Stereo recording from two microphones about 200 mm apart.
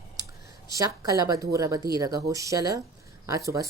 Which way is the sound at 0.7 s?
15° right (ahead or behind).